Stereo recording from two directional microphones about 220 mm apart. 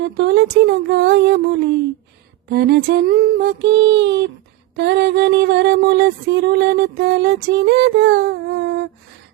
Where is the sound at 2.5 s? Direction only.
45° right (ahead or behind).